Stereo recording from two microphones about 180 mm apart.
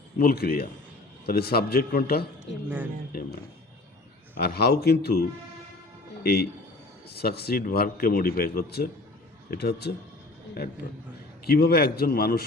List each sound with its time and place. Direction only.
0.2 s speech: 55° left (ahead or behind)
4.4 s speech: 60° left (ahead or behind)
6.2 s speech: 60° left (ahead or behind)
11.4 s speech: 60° left (ahead or behind)